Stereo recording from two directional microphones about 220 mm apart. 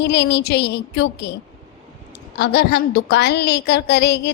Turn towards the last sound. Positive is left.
turn(degrees=50)  # may be behind; listen again after turning